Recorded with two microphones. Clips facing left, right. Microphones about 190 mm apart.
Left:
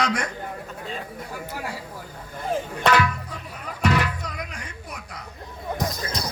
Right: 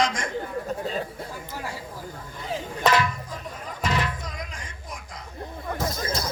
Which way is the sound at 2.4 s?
60° left (ahead or behind).